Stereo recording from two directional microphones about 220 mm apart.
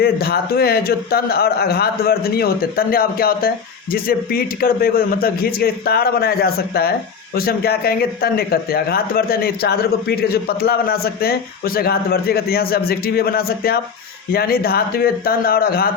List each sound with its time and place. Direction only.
0.0 s a man's voice: 45° left (ahead or behind)